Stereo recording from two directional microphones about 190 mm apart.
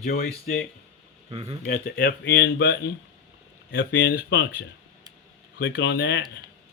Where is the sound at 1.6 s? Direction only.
50° left (ahead or behind); by 4.2 s 70° left (ahead or behind).